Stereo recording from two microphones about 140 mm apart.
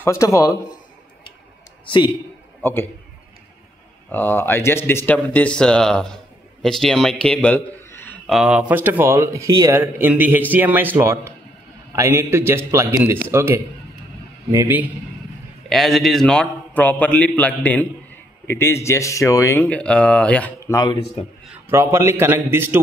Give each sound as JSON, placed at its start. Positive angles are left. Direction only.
{"t": 0.0, "sound": "a man's voice", "side_deg": 20}
{"t": 1.9, "sound": "a man's voice", "side_deg": 35}
{"t": 2.6, "sound": "a man's voice", "side_deg": 15}
{"t": 4.1, "sound": "a man's voice", "side_deg": 15}
{"t": 8.3, "sound": "speech", "side_deg": -5}
{"t": 15.7, "sound": "a man's voice", "side_deg": 0}
{"t": 20.6, "sound": "speech", "side_deg": 20}
{"t": 21.6, "sound": "speech", "side_deg": -20}